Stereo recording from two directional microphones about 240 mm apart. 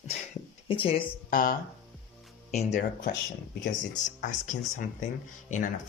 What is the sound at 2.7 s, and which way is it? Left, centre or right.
Speech, left.